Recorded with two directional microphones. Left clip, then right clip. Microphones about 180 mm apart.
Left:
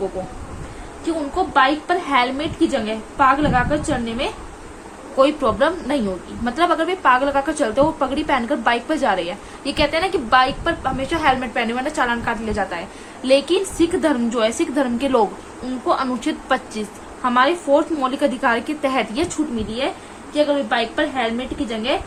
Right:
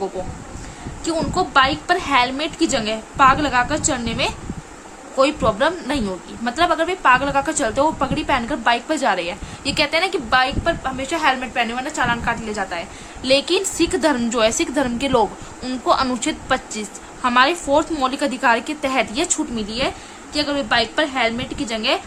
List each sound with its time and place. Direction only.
1.0 s a woman's voice: 40° right (ahead or behind)
5.1 s a woman's voice: 25° right (ahead or behind)
20.3 s a woman's voice: 40° right (ahead or behind)